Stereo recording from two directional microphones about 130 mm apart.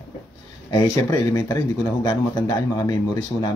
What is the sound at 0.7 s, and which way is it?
Speech, 25° left (ahead or behind).